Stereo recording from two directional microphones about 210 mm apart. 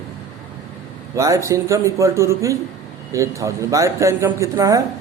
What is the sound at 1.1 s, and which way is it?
A man's voice, 15° right (ahead or behind).